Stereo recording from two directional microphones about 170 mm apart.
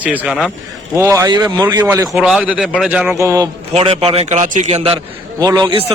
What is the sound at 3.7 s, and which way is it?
A man's voice, 35° right (ahead or behind).